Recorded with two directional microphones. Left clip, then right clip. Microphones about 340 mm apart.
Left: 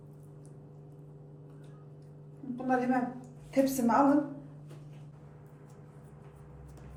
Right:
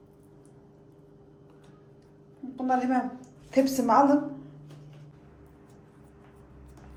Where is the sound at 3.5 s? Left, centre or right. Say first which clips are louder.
Right 5 dB; right.